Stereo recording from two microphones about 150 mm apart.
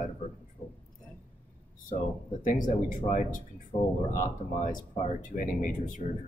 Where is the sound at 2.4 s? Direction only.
60° left (ahead or behind).